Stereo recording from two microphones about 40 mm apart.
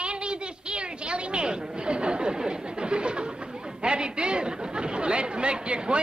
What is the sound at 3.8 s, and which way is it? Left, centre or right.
Chatter, right.